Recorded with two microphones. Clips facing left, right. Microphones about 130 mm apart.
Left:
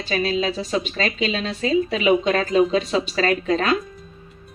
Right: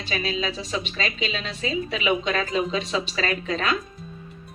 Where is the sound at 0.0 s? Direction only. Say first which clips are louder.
Left 5 dB; 40° left (ahead or behind).